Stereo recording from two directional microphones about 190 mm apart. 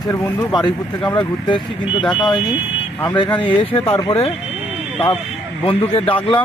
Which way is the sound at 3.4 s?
30° left (ahead or behind).